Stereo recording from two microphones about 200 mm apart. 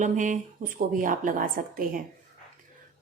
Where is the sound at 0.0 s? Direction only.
40° right (ahead or behind).